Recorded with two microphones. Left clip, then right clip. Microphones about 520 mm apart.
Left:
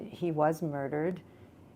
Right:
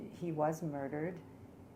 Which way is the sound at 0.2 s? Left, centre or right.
Left.